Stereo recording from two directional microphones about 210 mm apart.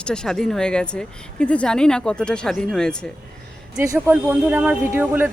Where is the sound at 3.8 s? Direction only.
10° right (ahead or behind).